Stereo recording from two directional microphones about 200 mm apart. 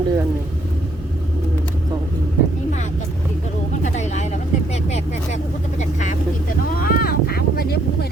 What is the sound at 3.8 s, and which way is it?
Vehicle, 35° left (ahead or behind).